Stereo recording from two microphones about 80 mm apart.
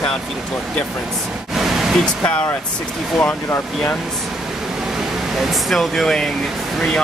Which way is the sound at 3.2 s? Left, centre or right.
Left.